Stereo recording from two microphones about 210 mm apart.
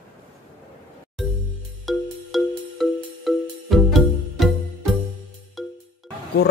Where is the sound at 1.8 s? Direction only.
Centre (ahead or behind).